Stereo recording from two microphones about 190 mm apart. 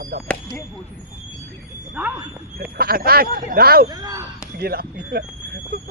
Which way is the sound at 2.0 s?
5° right (ahead or behind).